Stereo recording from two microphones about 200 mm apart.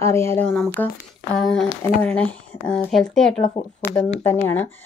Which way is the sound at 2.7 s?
5° left (ahead or behind).